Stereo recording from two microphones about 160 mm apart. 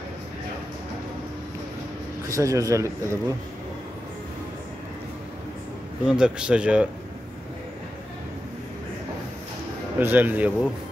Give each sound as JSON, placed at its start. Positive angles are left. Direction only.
{"t": 2.2, "sound": "speech", "side_deg": -20}
{"t": 6.0, "sound": "speech", "side_deg": -5}
{"t": 9.9, "sound": "speech", "side_deg": -10}